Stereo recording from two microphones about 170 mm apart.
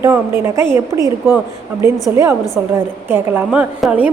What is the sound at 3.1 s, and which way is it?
Speech, 10° right (ahead or behind).